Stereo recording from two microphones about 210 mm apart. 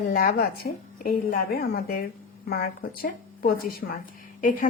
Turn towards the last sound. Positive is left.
turn(degrees=40)  # may be behind; listen again after turning